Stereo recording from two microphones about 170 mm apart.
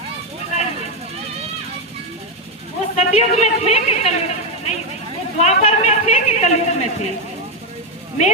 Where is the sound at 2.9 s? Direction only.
40° left (ahead or behind).